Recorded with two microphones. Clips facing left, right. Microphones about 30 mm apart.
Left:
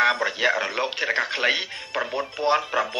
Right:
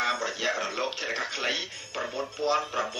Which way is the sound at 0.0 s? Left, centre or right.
Left.